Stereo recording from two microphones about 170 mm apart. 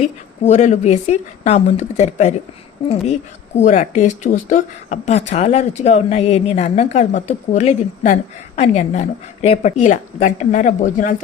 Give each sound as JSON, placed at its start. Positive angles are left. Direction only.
{"t": 0.0, "sound": "a woman's voice", "side_deg": 45}